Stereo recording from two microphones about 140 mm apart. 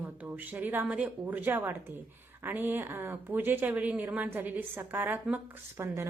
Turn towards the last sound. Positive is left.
turn(degrees=-20)  # may be behind; listen again after turning